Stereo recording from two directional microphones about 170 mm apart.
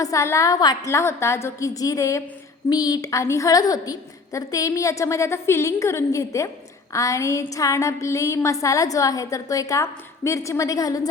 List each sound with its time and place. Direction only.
0.0 s a woman's voice: 20° left (ahead or behind)